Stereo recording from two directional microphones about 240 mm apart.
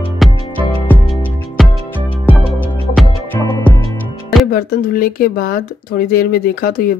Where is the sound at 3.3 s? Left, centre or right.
Centre.